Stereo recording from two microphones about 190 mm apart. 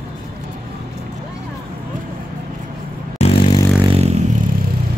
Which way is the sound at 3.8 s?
30° right (ahead or behind).